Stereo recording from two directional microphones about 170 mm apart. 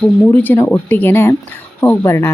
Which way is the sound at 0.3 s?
10° left (ahead or behind).